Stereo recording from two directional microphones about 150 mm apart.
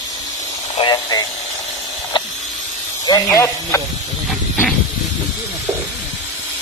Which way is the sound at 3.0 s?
20° left (ahead or behind).